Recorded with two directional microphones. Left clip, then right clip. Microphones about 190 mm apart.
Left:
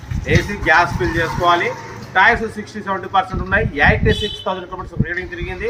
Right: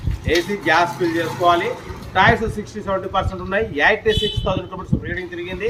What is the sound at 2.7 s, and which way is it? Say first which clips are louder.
Speech: left 4 dB; 15° right (ahead or behind).